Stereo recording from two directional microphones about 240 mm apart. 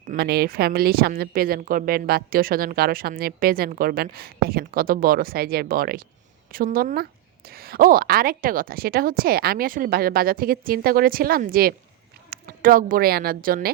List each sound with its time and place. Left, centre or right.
0.1 s a woman's voice: right